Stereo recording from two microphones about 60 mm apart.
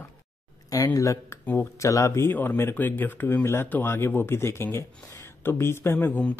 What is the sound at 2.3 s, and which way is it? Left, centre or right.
Speech, left.